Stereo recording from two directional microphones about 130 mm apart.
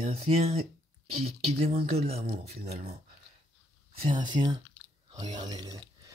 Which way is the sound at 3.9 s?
40° right (ahead or behind).